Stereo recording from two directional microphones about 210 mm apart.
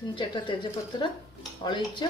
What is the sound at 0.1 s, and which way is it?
Speech, 20° left (ahead or behind).